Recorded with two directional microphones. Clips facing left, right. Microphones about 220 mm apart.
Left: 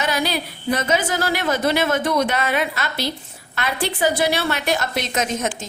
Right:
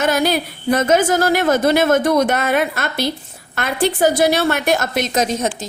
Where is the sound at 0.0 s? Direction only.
50° right (ahead or behind).